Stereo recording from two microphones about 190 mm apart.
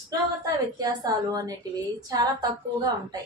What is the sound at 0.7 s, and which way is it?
A woman's voice, 20° right (ahead or behind).